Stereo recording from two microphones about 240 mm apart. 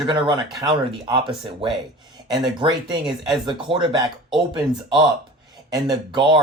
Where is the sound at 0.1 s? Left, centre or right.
Centre.